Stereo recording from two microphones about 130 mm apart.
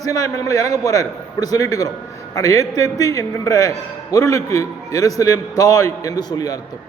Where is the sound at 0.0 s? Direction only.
25° left (ahead or behind).